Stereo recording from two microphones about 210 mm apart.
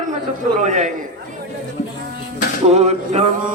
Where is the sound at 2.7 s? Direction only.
30° right (ahead or behind).